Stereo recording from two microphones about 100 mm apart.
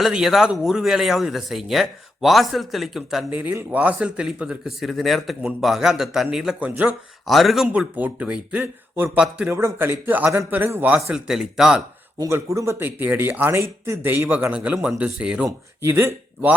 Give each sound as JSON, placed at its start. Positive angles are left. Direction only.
{"t": 0.0, "sound": "speech", "side_deg": -5}
{"t": 3.2, "sound": "a man's voice", "side_deg": -20}
{"t": 7.3, "sound": "speech", "side_deg": 0}
{"t": 7.7, "sound": "a man's voice", "side_deg": -15}
{"t": 9.5, "sound": "speech", "side_deg": -25}
{"t": 11.1, "sound": "speech", "side_deg": -5}
{"t": 12.2, "sound": "a man's voice", "side_deg": -30}
{"t": 15.4, "sound": "speech", "side_deg": -25}